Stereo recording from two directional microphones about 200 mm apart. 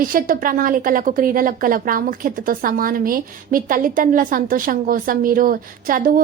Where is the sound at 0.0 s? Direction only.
45° right (ahead or behind).